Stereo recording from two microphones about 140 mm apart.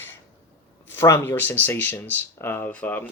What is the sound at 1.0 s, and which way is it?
Speech, 15° left (ahead or behind).